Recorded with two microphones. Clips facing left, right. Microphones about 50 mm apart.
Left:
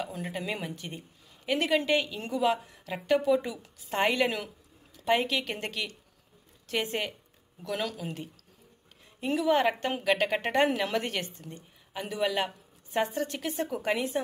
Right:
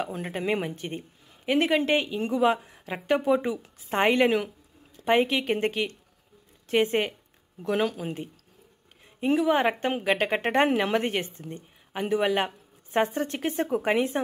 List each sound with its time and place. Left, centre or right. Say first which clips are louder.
0.0 s a woman's voice: right 5 dB; right
7.9 s a woman's voice: right 4 dB; centre